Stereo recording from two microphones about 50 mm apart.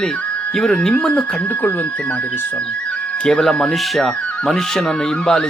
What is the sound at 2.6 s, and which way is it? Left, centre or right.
Music, left.